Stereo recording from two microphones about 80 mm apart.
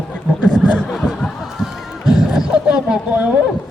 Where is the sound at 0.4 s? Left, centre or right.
Centre.